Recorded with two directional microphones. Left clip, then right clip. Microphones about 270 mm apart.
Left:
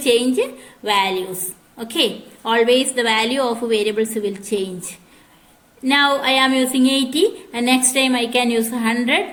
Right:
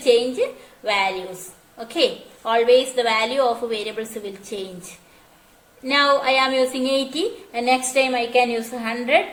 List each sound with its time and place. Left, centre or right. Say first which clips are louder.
0.0 s speech: left 1 dB; left
5.8 s speech: left 1 dB; left